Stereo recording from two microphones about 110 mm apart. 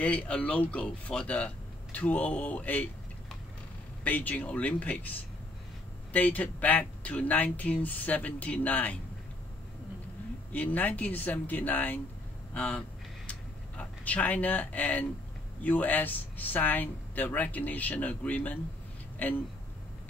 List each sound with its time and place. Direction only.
0.0 s speech: 10° left (ahead or behind)
4.0 s speech: 15° left (ahead or behind)
10.5 s speech: 15° left (ahead or behind)
13.3 s a sound: 15° left (ahead or behind)
15.6 s a woman's voice: 15° left (ahead or behind)